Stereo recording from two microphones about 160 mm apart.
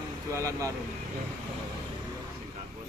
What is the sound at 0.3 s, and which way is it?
Speech, 20° right (ahead or behind).